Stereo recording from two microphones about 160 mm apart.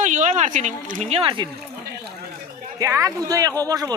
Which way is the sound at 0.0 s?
50° right (ahead or behind).